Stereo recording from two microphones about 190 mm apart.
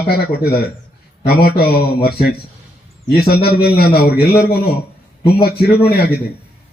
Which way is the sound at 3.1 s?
55° left (ahead or behind).